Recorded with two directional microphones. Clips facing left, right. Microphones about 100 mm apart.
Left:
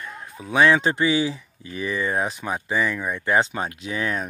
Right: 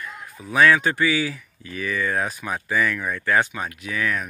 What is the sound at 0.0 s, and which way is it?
Speech, 20° left (ahead or behind).